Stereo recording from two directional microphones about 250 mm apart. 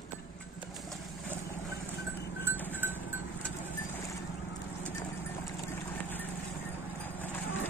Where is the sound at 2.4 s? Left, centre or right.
Centre.